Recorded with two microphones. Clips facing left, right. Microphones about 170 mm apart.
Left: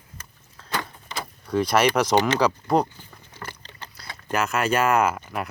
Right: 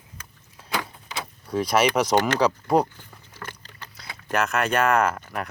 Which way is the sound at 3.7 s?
30° left (ahead or behind).